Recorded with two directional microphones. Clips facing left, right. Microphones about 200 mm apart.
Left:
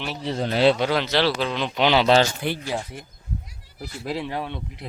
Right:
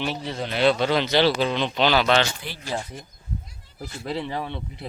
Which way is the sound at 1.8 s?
20° left (ahead or behind).